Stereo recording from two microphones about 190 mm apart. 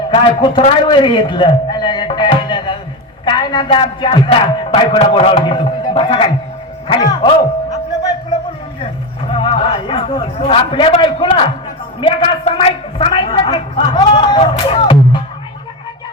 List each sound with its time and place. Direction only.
0.1 s a man's voice: 25° left (ahead or behind)
6.8 s a sound: 25° left (ahead or behind)
9.3 s a man's voice: 30° left (ahead or behind)